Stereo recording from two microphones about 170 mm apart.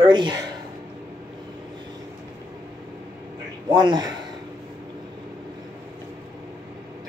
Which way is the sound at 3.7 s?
25° right (ahead or behind).